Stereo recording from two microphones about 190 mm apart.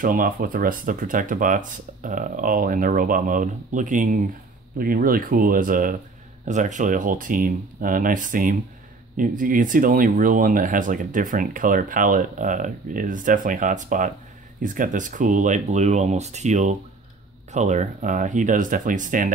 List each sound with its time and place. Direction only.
0.0 s speech: 45° right (ahead or behind)